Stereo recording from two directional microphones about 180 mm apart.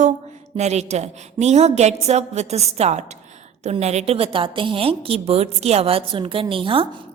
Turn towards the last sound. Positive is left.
turn(degrees=-30)  # may be behind; listen again after turning